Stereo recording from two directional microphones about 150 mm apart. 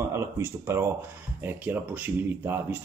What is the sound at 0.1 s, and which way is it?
Speech, 15° right (ahead or behind).